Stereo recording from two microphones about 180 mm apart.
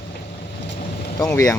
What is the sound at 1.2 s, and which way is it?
Speech, 20° left (ahead or behind).